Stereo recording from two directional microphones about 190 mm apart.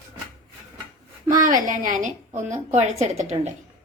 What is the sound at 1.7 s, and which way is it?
A woman's voice, 40° right (ahead or behind).